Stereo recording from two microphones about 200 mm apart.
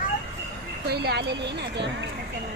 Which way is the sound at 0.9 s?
55° right (ahead or behind).